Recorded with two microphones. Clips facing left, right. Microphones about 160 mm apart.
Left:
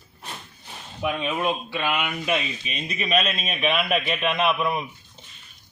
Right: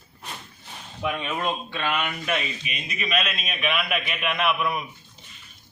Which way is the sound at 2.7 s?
30° left (ahead or behind).